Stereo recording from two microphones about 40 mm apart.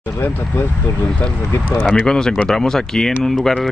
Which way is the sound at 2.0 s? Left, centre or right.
Centre.